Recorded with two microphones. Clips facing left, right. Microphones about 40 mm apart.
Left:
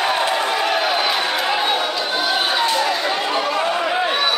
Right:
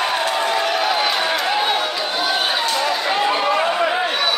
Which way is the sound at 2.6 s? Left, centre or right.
Centre.